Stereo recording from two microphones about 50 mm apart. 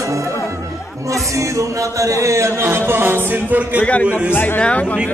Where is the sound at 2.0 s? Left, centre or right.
Right.